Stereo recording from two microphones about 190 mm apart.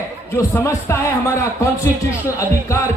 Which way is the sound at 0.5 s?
15° left (ahead or behind).